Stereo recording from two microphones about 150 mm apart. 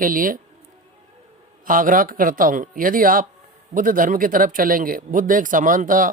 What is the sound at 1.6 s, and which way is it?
Speech, 65° right (ahead or behind).